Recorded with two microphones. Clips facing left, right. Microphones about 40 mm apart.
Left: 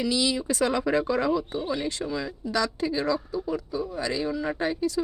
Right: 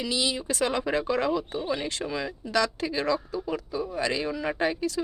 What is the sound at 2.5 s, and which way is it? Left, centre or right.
Speech, right.